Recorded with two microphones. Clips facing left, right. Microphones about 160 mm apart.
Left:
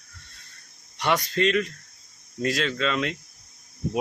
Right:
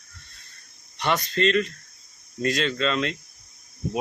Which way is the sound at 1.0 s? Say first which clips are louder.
Even; 10° left (ahead or behind).